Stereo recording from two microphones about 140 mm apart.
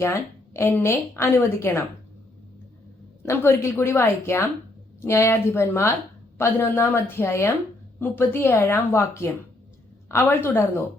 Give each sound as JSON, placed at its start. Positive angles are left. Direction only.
{"t": 0.0, "sound": "a woman's voice", "side_deg": 20}
{"t": 3.2, "sound": "a woman's voice", "side_deg": 20}